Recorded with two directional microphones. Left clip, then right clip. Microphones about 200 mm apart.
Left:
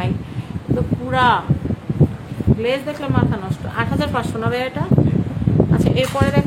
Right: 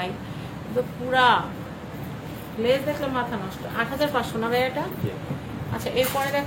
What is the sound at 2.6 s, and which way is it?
Speech, 45° left (ahead or behind).